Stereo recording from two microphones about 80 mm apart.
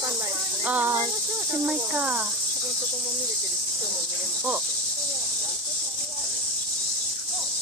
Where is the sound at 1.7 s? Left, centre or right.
Centre.